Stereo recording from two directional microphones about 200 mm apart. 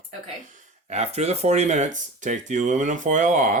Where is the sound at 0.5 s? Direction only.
35° right (ahead or behind).